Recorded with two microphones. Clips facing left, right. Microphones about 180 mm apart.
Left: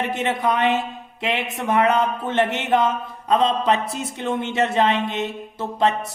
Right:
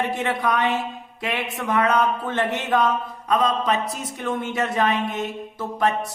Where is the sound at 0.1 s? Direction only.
25° left (ahead or behind).